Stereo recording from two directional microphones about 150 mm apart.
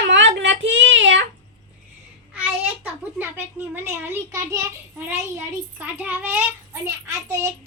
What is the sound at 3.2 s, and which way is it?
A child's voice, 15° right (ahead or behind).